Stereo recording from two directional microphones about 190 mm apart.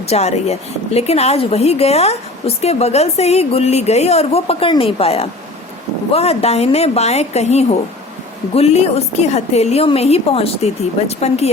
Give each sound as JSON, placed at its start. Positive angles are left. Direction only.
{"t": 0.1, "sound": "a woman's voice", "side_deg": 35}